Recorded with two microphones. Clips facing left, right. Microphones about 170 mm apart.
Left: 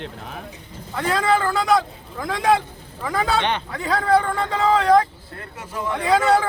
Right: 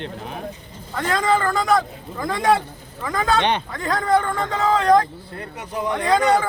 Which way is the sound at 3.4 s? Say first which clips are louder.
Right 2 dB; 15° right (ahead or behind).